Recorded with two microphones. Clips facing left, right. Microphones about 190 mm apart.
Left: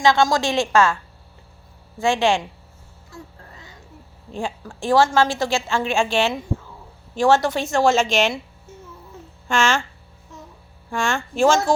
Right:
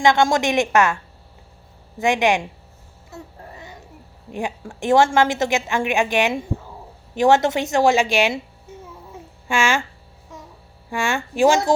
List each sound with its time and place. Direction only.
0.0 s a woman's voice: 20° right (ahead or behind)
2.0 s a woman's voice: 20° right (ahead or behind)
4.3 s a woman's voice: 20° right (ahead or behind)
9.5 s a woman's voice: 15° right (ahead or behind)
10.9 s speech: 15° right (ahead or behind)